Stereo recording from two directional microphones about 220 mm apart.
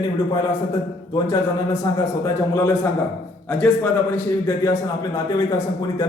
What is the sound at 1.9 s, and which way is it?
A man's voice, 15° left (ahead or behind).